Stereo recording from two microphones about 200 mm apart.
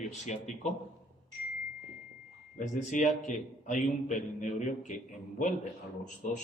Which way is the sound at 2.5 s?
35° left (ahead or behind).